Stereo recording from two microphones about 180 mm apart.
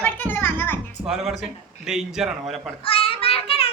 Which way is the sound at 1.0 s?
5° right (ahead or behind).